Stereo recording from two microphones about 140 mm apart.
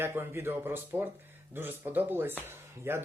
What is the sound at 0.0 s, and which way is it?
Speech, 15° right (ahead or behind).